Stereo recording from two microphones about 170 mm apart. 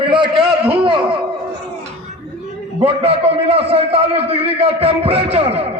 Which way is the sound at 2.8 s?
35° right (ahead or behind).